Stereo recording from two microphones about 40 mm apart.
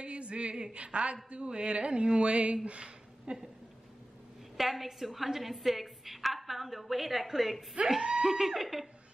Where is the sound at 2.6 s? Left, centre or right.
Right.